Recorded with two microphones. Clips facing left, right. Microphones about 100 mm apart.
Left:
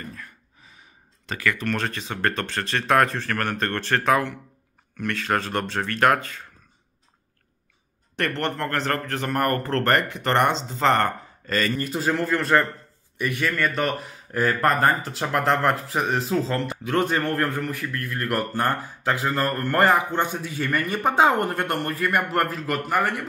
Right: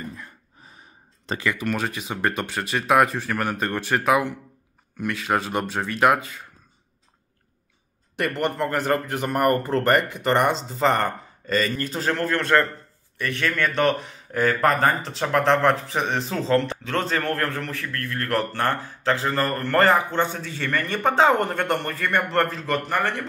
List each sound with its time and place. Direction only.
0.0 s gasp: 20° right (ahead or behind)
1.4 s speech: 20° right (ahead or behind)
8.2 s speech: 5° right (ahead or behind)